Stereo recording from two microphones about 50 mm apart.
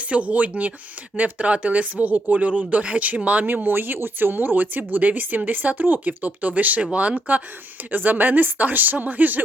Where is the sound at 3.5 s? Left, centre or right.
Right.